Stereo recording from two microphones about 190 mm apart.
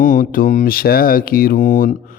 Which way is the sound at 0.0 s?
45° left (ahead or behind).